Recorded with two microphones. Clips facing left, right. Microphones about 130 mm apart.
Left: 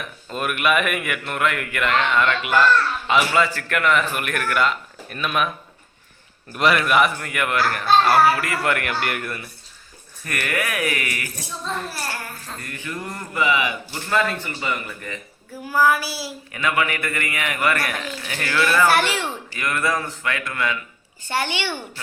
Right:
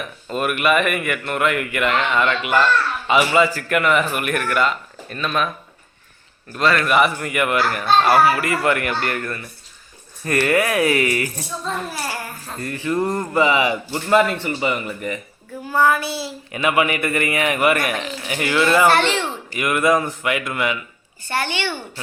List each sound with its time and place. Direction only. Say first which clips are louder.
0.0 s speech: right 4 dB; centre (ahead or behind)
6.5 s a woman's voice: right 1 dB; 15° left (ahead or behind)
6.8 s speech: right 2 dB; centre (ahead or behind)
10.2 s a man's voice: right 8 dB; 30° right (ahead or behind)
11.9 s a sound: right 3 dB; 10° right (ahead or behind)
12.6 s a man's voice: right 12 dB; 30° right (ahead or behind)
15.7 s speech: right 1 dB; 5° left (ahead or behind)
16.5 s a man's voice: right 4 dB; 20° right (ahead or behind)
18.9 s speech: right 3 dB; 5° left (ahead or behind)
19.5 s a man's voice: right 7 dB; 15° right (ahead or behind)
21.2 s a woman's voice: right 1 dB; 15° left (ahead or behind)